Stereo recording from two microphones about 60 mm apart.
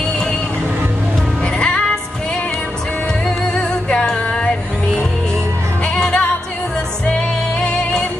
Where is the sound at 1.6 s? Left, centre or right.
Centre.